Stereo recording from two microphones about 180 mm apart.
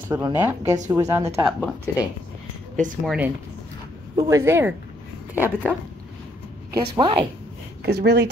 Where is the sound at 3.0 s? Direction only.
5° right (ahead or behind).